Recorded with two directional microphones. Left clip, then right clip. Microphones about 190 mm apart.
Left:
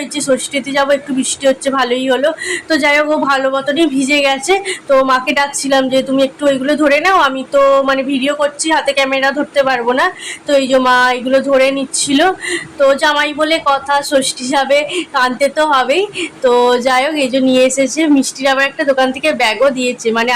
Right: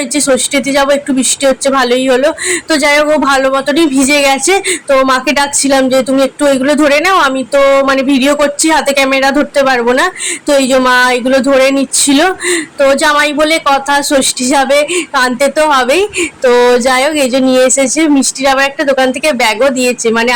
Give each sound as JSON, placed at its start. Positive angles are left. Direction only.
{"t": 0.5, "sound": "speech", "side_deg": -20}